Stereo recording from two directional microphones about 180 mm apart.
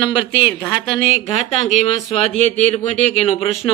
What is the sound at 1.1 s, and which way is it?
A man's voice, 35° left (ahead or behind).